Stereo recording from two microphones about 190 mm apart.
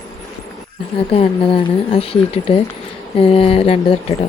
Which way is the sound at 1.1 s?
30° left (ahead or behind).